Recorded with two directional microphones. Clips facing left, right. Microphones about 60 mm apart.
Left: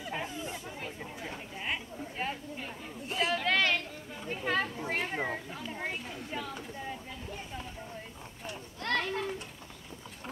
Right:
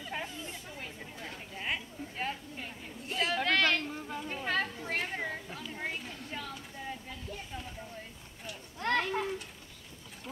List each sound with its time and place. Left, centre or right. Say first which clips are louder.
0.0 s chatter: left 2 dB; centre
3.4 s a sound: right 1 dB; centre
4.3 s chatter: left 2 dB; centre
4.8 s a sound: left 2 dB; centre
8.7 s children playing: right 2 dB; centre
9.0 s pigeon: right 1 dB; centre